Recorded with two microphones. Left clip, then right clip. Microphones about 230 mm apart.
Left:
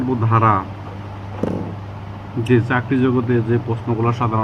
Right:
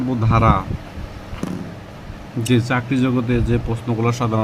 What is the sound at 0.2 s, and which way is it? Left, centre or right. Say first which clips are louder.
Speech: left 1 dB; right.